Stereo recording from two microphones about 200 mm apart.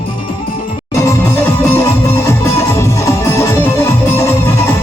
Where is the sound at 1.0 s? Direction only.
10° left (ahead or behind).